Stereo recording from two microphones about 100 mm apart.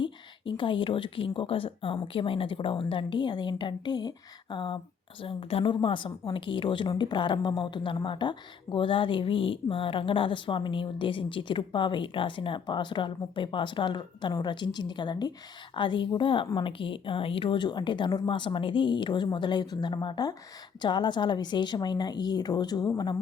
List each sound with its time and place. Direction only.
0.0 s a woman's voice: 55° left (ahead or behind)
5.2 s a woman's voice: 65° left (ahead or behind); by 22.9 s 40° left (ahead or behind)